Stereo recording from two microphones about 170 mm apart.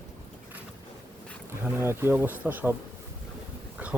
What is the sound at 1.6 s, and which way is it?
Speech, 15° right (ahead or behind).